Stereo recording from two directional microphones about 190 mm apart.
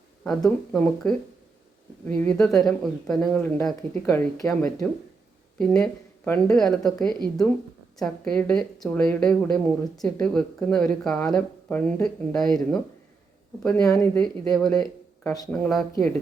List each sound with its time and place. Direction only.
0.3 s speech: 5° left (ahead or behind)
5.5 s speech: 5° left (ahead or behind)
7.9 s speech: 5° left (ahead or behind)
15.3 s speech: 20° left (ahead or behind)
15.5 s speech: 5° left (ahead or behind)